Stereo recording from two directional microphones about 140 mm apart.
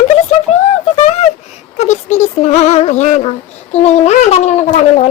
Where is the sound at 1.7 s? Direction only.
55° left (ahead or behind).